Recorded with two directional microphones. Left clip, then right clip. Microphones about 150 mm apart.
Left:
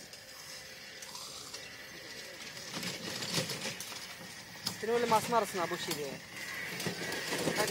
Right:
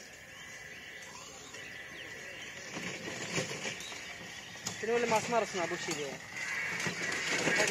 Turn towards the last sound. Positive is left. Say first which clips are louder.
# right 3 dB
turn(degrees=-25)  # may be behind; listen again after turning